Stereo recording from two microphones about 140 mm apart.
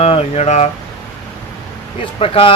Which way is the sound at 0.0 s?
45° left (ahead or behind).